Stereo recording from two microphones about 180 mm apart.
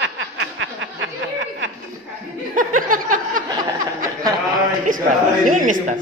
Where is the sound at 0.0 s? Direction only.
90° right.